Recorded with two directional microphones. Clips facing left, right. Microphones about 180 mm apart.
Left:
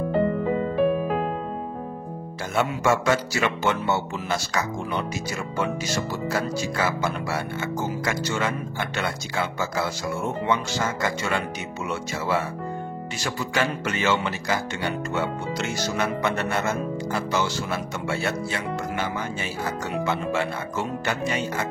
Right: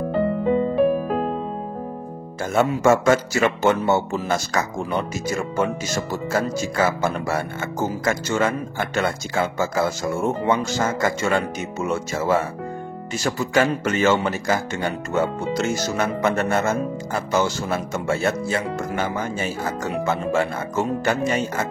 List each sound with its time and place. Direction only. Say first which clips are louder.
2.5 s speech: right 5 dB; 45° right (ahead or behind)